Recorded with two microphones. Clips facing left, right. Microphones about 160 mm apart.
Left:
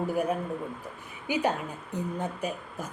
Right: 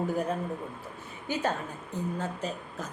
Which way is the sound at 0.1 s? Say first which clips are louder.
Left 2 dB; 10° left (ahead or behind).